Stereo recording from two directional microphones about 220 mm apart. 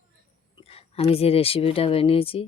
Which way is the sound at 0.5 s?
25° left (ahead or behind).